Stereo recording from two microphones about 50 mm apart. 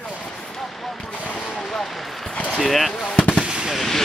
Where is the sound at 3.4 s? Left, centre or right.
Centre.